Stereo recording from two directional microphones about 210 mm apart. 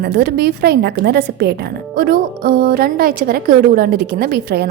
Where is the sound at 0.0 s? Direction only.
50° right (ahead or behind).